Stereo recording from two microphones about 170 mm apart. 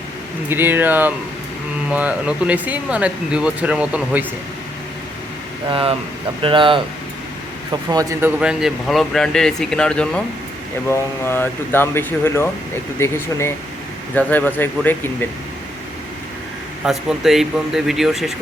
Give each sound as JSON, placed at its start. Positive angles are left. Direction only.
{"t": 0.4, "sound": "speech", "side_deg": -10}
{"t": 6.4, "sound": "speech", "side_deg": -30}
{"t": 8.4, "sound": "speech", "side_deg": -5}
{"t": 11.3, "sound": "speech", "side_deg": 10}
{"t": 16.8, "sound": "speech", "side_deg": 0}